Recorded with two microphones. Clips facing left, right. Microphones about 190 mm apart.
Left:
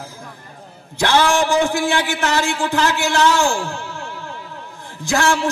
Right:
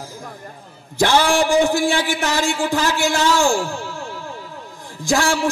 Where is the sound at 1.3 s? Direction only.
50° right (ahead or behind).